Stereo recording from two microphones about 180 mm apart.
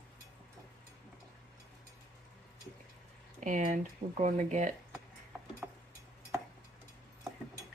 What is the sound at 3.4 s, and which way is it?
Speech, 40° right (ahead or behind).